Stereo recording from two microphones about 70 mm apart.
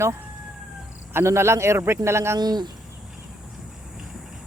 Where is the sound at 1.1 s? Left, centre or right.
Right.